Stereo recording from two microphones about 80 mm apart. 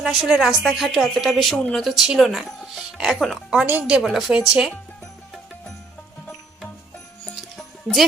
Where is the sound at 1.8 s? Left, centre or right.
Centre.